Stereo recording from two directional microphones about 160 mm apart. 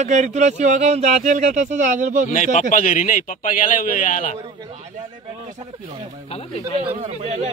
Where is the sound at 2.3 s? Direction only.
55° left (ahead or behind).